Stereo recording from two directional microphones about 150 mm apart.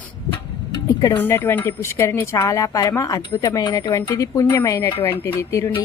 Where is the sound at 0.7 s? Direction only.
25° left (ahead or behind).